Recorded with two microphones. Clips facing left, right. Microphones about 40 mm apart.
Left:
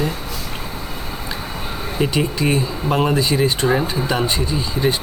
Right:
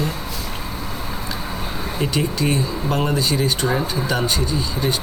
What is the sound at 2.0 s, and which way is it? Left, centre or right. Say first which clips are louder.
Speech: left 3 dB; centre.